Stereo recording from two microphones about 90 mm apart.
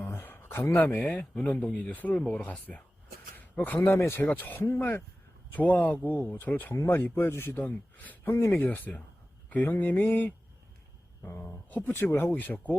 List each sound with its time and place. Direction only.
0.0 s a sound: 25° left (ahead or behind)
0.9 s a man's voice: 15° left (ahead or behind); by 8.5 s 30° left (ahead or behind)
8.5 s a man's voice: 20° left (ahead or behind)